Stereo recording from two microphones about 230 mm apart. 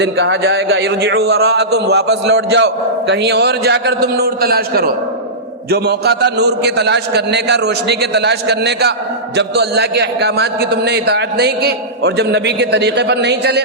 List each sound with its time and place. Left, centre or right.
0.0 s speech: right